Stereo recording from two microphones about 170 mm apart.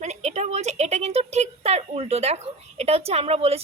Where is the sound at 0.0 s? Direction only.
45° right (ahead or behind).